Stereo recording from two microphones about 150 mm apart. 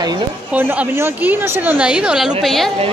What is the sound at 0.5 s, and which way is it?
A woman's voice, 15° right (ahead or behind).